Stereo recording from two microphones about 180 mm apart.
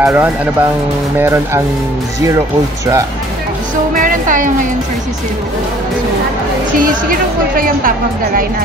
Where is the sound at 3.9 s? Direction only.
50° right (ahead or behind).